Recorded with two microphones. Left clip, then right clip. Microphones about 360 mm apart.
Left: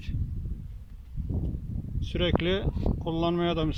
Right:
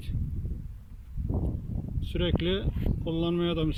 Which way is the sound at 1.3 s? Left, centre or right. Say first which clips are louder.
Right 3 dB; right.